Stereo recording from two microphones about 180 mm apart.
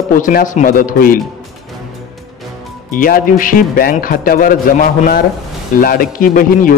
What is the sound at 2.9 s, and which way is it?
A man's voice, 50° left (ahead or behind).